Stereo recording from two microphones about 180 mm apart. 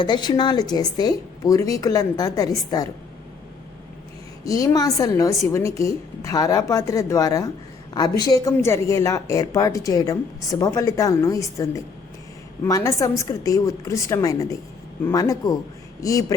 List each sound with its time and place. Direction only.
0.0 s speech: 25° left (ahead or behind)
4.4 s a woman's voice: 20° left (ahead or behind)